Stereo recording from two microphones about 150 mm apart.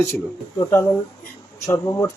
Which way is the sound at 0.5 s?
20° left (ahead or behind).